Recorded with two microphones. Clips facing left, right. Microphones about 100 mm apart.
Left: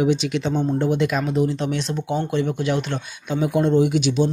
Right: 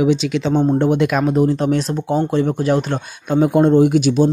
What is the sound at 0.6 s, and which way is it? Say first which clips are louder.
Speech: right 5 dB; 55° right (ahead or behind).